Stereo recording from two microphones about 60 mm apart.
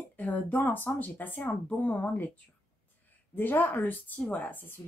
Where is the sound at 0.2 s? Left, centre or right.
Left.